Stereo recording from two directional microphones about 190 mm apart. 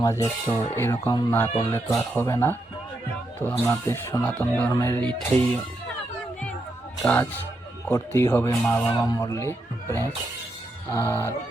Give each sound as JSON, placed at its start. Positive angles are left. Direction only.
{"t": 0.0, "sound": "speech", "side_deg": 15}
{"t": 7.0, "sound": "speech", "side_deg": 10}